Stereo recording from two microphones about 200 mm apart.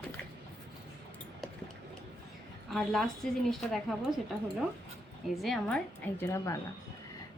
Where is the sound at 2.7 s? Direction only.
Centre (ahead or behind).